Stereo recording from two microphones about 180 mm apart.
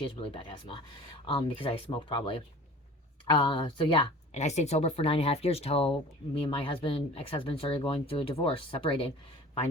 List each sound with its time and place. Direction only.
0.0 s speech: 30° left (ahead or behind)
4.4 s speech: 40° left (ahead or behind)